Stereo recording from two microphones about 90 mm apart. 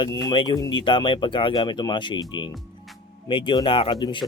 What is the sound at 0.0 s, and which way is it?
Speech, 60° left (ahead or behind).